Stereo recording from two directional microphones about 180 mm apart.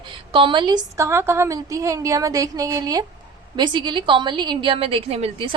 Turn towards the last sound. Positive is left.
turn(degrees=-30)  # may be behind; listen again after turning